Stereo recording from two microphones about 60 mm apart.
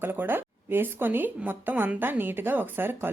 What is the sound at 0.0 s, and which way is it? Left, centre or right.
A woman's voice, right.